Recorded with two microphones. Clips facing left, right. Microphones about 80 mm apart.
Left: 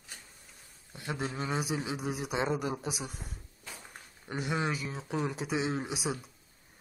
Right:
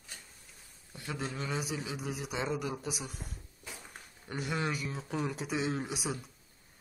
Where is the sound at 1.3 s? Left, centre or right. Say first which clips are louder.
Left 4 dB; left.